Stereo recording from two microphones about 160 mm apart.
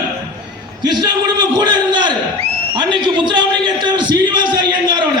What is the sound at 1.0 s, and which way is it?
A man's voice, 25° right (ahead or behind).